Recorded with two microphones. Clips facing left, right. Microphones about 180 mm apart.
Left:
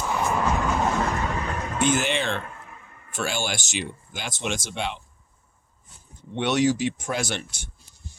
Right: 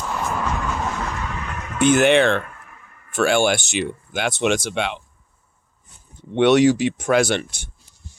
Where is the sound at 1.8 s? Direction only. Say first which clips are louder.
Right 9 dB; 65° right (ahead or behind).